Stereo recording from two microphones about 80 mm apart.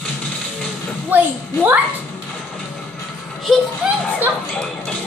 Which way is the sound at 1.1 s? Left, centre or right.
Right.